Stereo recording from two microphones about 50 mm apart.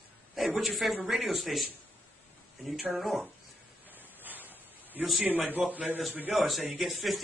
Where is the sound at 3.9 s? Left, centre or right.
Right.